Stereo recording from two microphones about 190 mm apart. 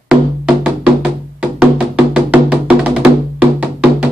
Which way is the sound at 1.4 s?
5° right (ahead or behind).